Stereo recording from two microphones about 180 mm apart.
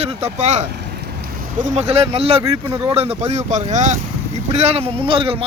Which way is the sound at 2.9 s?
35° right (ahead or behind).